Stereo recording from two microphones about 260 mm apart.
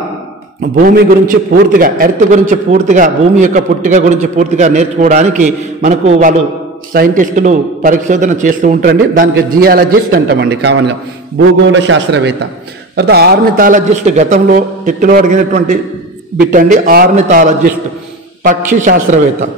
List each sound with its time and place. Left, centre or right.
0.7 s a man's voice: right